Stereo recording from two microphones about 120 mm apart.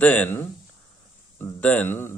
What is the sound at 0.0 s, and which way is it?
Speech, 15° left (ahead or behind).